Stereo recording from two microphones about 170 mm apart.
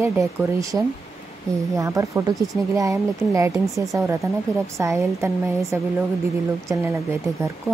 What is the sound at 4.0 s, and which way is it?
Speech, 5° right (ahead or behind).